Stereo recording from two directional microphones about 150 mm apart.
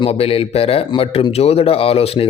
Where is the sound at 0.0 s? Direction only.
40° left (ahead or behind).